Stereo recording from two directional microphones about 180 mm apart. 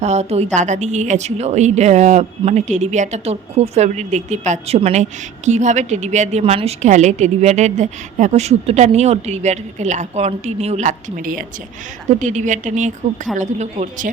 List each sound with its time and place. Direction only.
0.0 s a woman's voice: 40° right (ahead or behind)